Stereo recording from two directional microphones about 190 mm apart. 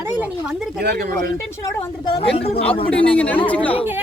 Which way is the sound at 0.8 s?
60° right (ahead or behind).